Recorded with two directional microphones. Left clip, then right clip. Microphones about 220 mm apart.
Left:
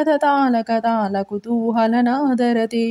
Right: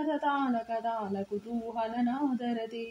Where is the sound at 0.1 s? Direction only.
35° left (ahead or behind).